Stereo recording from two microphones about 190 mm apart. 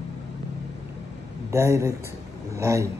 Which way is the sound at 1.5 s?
15° right (ahead or behind).